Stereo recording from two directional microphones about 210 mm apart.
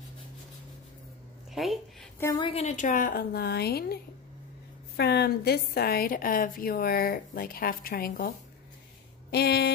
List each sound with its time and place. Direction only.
1.5 s speech: centre (ahead or behind)
2.1 s a woman's voice: 10° left (ahead or behind)
2.4 s a woman's voice: 30° left (ahead or behind)
9.3 s a woman's voice: 50° left (ahead or behind)